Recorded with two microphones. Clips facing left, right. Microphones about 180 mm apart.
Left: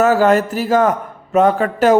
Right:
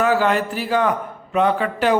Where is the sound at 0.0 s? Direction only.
45° left (ahead or behind).